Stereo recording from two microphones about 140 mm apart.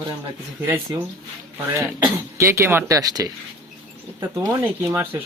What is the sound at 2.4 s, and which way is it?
Speech, 20° right (ahead or behind).